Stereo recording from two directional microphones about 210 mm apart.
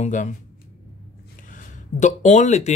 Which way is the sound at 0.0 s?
35° left (ahead or behind).